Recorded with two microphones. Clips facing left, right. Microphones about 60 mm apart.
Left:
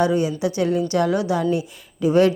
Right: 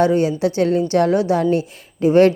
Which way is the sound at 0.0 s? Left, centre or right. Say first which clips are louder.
Right 4 dB; right.